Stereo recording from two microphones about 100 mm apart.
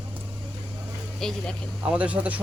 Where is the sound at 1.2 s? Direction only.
5° left (ahead or behind).